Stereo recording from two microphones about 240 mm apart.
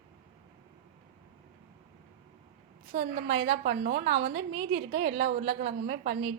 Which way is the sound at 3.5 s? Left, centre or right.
Right.